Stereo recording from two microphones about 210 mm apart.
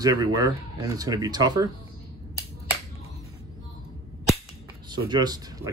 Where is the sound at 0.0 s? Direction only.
15° right (ahead or behind).